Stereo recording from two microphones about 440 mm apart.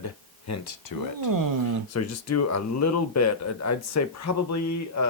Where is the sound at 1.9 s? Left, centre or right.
Left.